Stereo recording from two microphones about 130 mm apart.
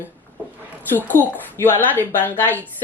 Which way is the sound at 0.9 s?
15° left (ahead or behind).